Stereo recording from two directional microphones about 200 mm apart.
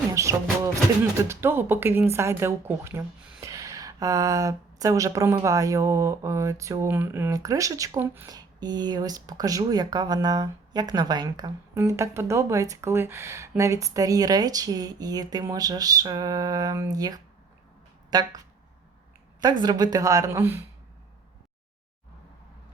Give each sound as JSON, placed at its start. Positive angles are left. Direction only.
{"t": 0.1, "sound": "music", "side_deg": -15}
{"t": 1.1, "sound": "speech", "side_deg": -10}
{"t": 19.4, "sound": "speech", "side_deg": -20}